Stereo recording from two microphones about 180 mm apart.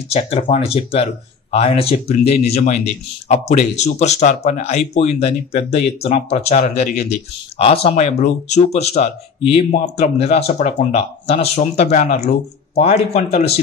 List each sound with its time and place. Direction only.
0.1 s speech: 35° left (ahead or behind)